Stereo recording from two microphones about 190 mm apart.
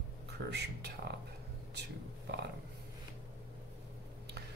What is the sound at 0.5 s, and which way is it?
Speech, 60° right (ahead or behind).